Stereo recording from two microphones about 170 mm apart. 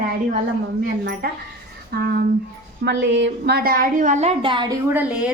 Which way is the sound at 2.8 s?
90° right.